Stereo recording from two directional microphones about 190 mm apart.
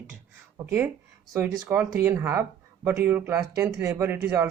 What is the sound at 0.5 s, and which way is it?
Speech, 10° right (ahead or behind).